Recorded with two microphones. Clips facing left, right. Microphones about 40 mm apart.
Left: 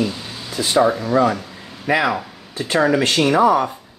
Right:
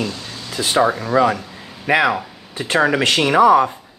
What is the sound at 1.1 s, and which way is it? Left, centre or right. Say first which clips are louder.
Speech: right 1 dB; right.